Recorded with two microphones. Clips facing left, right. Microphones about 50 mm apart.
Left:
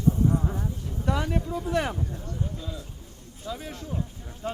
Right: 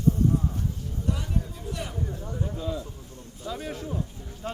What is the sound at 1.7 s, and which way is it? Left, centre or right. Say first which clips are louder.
Speech: left 9 dB; left.